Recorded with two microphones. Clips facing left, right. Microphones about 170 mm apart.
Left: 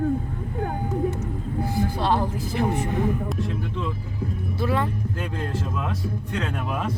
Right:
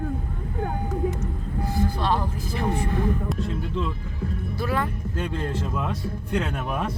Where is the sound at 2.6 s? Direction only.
20° left (ahead or behind).